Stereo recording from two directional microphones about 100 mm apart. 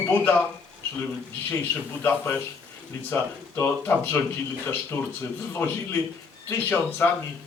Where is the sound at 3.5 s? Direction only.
25° left (ahead or behind).